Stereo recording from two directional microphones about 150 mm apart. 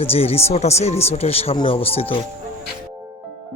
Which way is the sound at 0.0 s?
40° left (ahead or behind).